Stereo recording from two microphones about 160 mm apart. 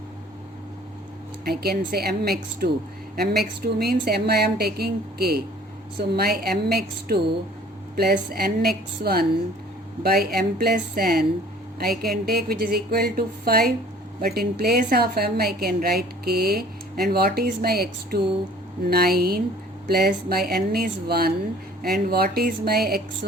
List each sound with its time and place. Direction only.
1.5 s a woman's voice: 75° right (ahead or behind)
2.6 s a woman's voice: 65° right (ahead or behind)